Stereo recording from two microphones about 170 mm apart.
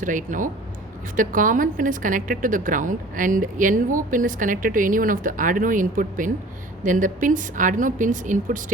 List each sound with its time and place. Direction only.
0.0 s a woman's voice: 50° right (ahead or behind)